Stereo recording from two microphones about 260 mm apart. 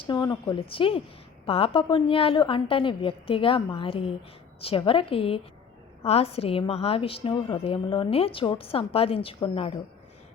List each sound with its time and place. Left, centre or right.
0.0 s a woman's voice: centre